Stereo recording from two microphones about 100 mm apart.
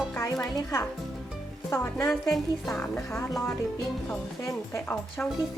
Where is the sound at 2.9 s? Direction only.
25° left (ahead or behind).